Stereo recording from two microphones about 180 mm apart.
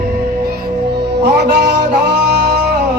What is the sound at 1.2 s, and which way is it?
Music, 70° right (ahead or behind).